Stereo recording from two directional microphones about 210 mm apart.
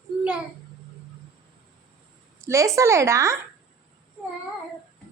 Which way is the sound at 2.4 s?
15° right (ahead or behind).